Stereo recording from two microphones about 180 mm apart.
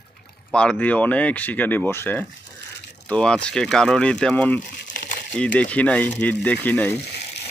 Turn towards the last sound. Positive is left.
turn(degrees=10)  # may be behind; listen again after turning